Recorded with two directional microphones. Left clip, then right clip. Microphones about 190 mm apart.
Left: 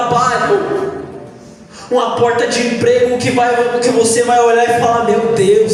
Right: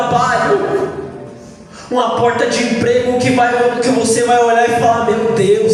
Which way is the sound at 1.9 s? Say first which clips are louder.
Left 1 dB; 35° left (ahead or behind).